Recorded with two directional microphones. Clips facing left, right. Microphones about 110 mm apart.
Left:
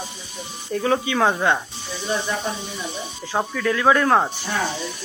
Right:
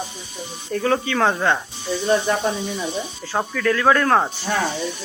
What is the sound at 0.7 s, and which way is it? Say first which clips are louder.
Speech: even; 10° left (ahead or behind).